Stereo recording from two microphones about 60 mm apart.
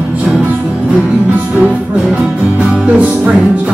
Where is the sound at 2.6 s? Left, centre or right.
Centre.